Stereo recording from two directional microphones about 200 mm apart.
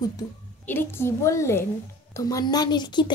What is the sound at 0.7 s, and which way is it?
A woman's voice, 10° left (ahead or behind).